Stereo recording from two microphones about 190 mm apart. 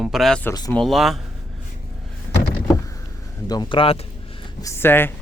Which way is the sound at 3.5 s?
25° left (ahead or behind).